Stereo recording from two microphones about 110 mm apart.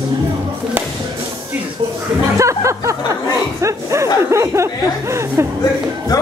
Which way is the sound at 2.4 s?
25° right (ahead or behind).